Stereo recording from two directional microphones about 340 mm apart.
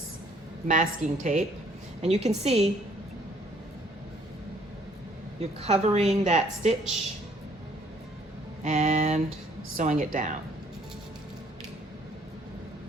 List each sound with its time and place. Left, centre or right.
0.7 s a woman's voice: right
5.4 s a woman's voice: centre
8.6 s a woman's voice: right